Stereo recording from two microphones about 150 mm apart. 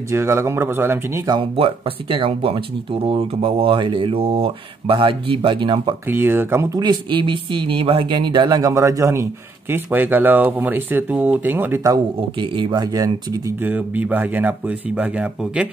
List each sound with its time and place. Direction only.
0.1 s speech: 15° right (ahead or behind)
1.2 s speech: 35° right (ahead or behind)
6.0 s speech: 15° right (ahead or behind)
6.8 s speech: 30° right (ahead or behind)
13.7 s speech: 10° right (ahead or behind)